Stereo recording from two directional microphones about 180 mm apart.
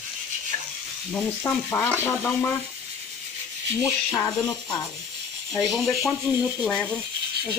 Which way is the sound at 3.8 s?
15° left (ahead or behind).